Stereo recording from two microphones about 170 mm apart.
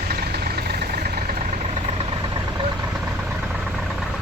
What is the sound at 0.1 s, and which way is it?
Vehicle, 65° right (ahead or behind).